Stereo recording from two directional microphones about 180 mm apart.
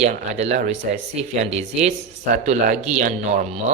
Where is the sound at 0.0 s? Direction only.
35° right (ahead or behind).